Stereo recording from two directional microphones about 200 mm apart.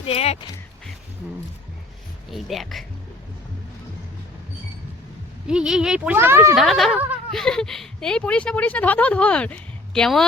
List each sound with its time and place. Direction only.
0.0 s speech: 30° left (ahead or behind)
2.3 s speech: centre (ahead or behind)
5.5 s speech: 5° right (ahead or behind)
6.6 s speech: centre (ahead or behind)